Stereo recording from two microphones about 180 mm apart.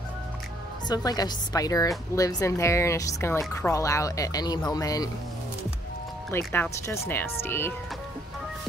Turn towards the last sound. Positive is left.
turn(degrees=10)  # may be behind; listen again after turning